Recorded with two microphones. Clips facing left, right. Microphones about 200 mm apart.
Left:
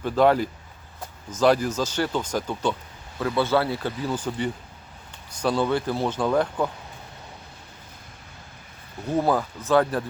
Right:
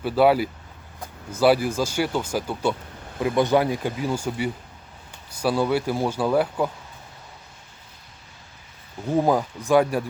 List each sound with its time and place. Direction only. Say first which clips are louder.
0.0 s speech: right 1 dB; 10° right (ahead or behind)
9.1 s speech: right 2 dB; 15° right (ahead or behind)